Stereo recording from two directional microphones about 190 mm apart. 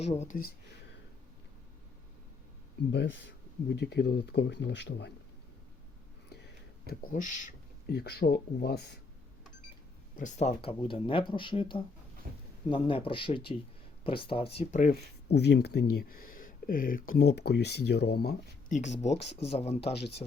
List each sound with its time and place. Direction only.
0.0 s speech: 35° left (ahead or behind)
2.9 s speech: 70° left (ahead or behind)
6.2 s a sound: 60° left (ahead or behind); by 7.5 s 40° left (ahead or behind)
7.9 s speech: 55° left (ahead or behind)
10.2 s speech: 40° left (ahead or behind)
12.2 s speech: 45° right (ahead or behind)
12.6 s speech: 25° left (ahead or behind); by 18.3 s 55° left (ahead or behind)
18.7 s speech: 40° left (ahead or behind)
19.8 s speech: 60° left (ahead or behind)